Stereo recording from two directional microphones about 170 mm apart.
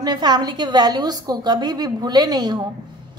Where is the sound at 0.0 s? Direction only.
25° right (ahead or behind).